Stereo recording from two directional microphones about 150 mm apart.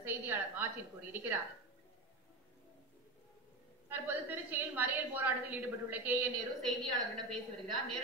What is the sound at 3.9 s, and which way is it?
A woman's voice, 10° right (ahead or behind).